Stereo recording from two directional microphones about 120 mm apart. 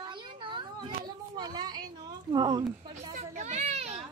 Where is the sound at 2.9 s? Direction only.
65° right (ahead or behind).